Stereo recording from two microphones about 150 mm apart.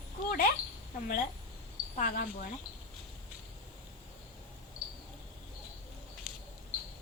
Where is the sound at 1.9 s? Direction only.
70° left (ahead or behind).